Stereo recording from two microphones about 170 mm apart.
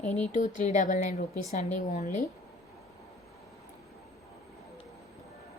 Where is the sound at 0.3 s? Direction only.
45° left (ahead or behind).